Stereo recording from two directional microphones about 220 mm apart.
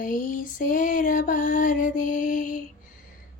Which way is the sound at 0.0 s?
35° left (ahead or behind).